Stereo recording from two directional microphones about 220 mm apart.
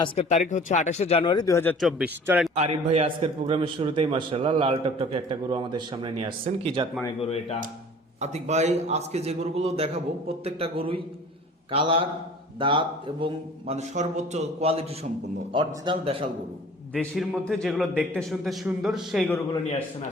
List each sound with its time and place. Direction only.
0.0 s speech: 30° left (ahead or behind); by 1.7 s 15° left (ahead or behind)
1.8 s a man's voice: 5° right (ahead or behind)
2.6 s a man's voice: 30° right (ahead or behind)
7.2 s speech: 25° left (ahead or behind)
8.2 s a man's voice: 30° right (ahead or behind)
16.9 s a man's voice: centre (ahead or behind)